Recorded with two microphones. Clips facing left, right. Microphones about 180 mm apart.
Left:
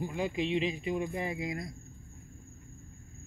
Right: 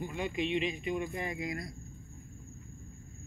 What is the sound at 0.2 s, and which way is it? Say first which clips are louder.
Speech: left 2 dB; 30° left (ahead or behind).